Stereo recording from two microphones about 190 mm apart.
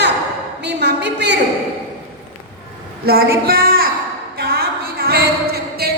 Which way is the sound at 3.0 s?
55° right (ahead or behind).